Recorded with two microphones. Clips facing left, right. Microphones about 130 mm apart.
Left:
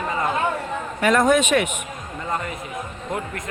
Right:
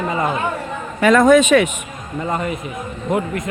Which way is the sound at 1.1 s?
90° right.